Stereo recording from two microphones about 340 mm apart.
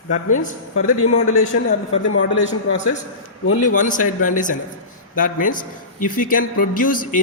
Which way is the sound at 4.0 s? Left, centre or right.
Left.